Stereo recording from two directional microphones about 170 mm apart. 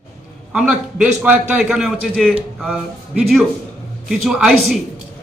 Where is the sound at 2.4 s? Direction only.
5° right (ahead or behind).